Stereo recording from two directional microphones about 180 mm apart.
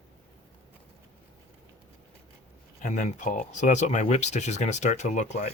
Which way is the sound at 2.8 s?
45° left (ahead or behind).